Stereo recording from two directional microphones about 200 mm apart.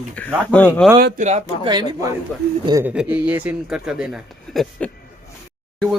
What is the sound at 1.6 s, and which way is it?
Speech, 20° right (ahead or behind).